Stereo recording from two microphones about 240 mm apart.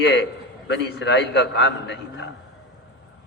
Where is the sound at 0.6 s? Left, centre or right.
Left.